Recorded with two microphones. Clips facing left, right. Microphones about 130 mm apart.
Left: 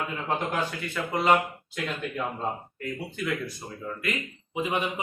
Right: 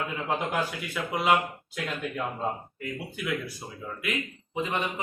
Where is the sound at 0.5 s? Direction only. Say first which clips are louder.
Even; 10° right (ahead or behind).